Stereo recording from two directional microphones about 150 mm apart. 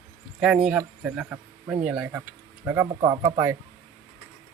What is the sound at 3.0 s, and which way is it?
Speech, 30° right (ahead or behind).